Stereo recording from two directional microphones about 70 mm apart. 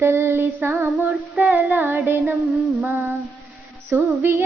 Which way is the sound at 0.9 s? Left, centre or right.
Right.